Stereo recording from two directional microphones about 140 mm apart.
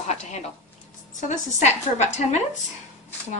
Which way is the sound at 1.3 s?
55° left (ahead or behind).